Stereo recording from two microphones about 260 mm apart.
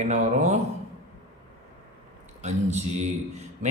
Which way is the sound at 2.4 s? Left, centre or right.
Right.